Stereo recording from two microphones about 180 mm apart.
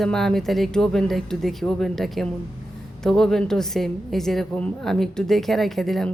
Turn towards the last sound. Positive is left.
turn(degrees=0)  # may be behind; listen again after turning